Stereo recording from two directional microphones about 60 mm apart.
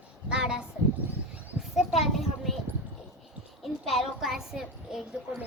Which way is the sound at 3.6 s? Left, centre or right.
Centre.